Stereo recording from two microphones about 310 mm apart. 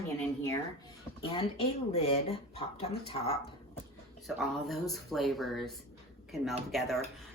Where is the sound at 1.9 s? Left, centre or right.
Centre.